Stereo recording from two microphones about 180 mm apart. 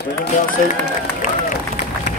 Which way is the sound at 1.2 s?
45° left (ahead or behind).